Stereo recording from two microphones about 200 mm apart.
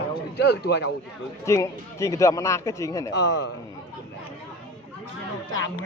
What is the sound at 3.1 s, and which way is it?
Speech, 60° left (ahead or behind).